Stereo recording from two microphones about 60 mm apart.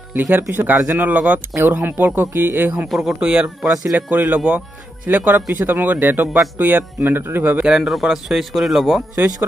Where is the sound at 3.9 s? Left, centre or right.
Right.